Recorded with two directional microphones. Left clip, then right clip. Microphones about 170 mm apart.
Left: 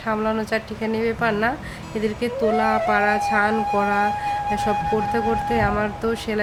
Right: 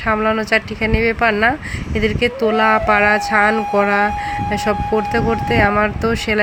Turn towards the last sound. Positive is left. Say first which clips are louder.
# right 6 dB
turn(degrees=-25)  # may be behind; listen again after turning